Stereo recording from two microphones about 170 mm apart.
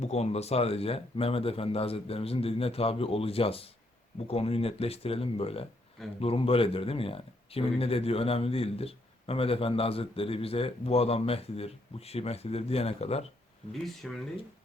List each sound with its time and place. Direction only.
0.0 s speech: 40° left (ahead or behind)
13.8 s speech: centre (ahead or behind)